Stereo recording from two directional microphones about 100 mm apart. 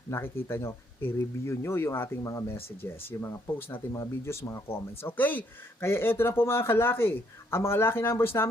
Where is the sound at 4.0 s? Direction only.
30° left (ahead or behind).